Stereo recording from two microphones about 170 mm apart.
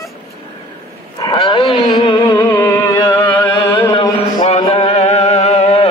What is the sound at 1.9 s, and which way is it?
Music, 25° left (ahead or behind).